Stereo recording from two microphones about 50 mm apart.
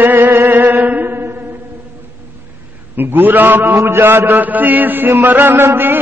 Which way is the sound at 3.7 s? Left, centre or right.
Right.